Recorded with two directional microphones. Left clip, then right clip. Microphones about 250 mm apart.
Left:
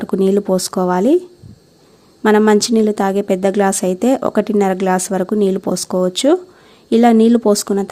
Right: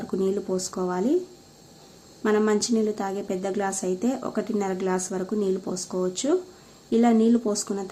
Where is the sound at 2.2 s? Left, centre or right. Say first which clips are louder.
Left 11 dB; left.